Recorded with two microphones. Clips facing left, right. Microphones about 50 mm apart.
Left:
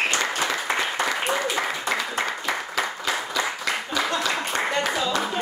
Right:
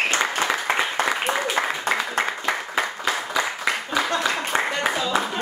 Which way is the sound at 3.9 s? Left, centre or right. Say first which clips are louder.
Right 1 dB; right.